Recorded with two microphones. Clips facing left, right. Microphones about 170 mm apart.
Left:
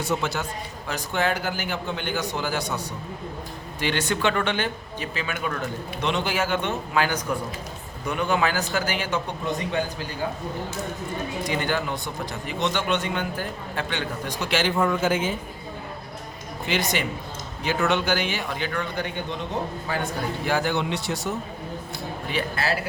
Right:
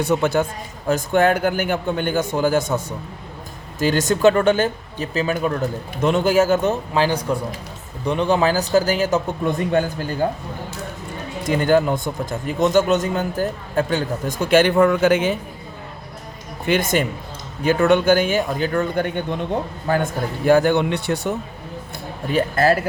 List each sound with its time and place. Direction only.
0.0 s a man's voice: 55° right (ahead or behind)
11.4 s speech: 45° right (ahead or behind); by 15.3 s 70° right (ahead or behind)
16.6 s speech: 50° right (ahead or behind)
22.3 s speech: 45° right (ahead or behind)